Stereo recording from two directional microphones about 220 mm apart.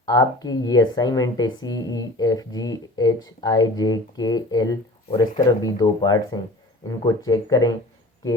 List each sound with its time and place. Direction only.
0.0 s speech: 15° left (ahead or behind)